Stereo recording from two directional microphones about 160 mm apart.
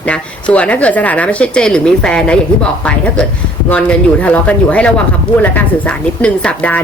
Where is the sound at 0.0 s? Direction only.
10° left (ahead or behind).